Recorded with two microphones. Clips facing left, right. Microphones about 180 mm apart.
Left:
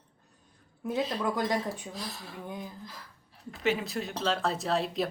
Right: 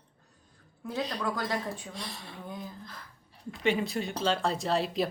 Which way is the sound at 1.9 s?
Centre (ahead or behind).